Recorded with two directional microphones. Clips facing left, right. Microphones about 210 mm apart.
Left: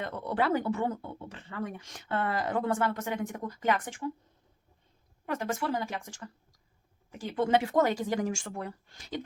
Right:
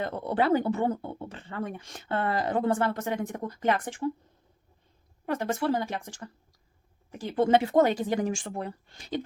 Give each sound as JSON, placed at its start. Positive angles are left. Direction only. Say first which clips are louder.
{"t": 0.0, "sound": "speech", "louder": "right 3 dB", "side_deg": -25}
{"t": 5.2, "sound": "speech", "louder": "right 4 dB", "side_deg": -35}